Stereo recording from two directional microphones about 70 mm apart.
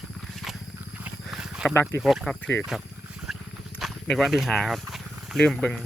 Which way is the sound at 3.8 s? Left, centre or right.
Centre.